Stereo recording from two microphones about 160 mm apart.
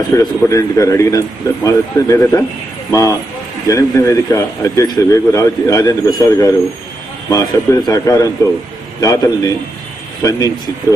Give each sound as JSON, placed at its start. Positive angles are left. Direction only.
{"t": 0.1, "sound": "speech", "side_deg": 20}